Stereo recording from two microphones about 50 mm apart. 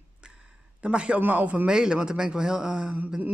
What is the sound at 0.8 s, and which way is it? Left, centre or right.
Speech, right.